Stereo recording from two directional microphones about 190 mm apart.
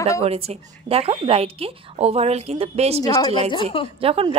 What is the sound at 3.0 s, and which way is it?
Speech, 20° left (ahead or behind).